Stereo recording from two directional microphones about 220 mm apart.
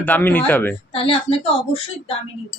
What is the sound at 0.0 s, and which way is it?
Speech, 10° left (ahead or behind).